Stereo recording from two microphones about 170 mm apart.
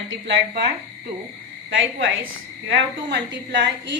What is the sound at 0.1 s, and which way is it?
Speech, 90° right.